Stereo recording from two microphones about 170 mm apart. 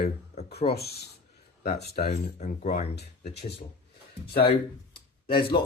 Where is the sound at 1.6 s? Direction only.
60° left (ahead or behind).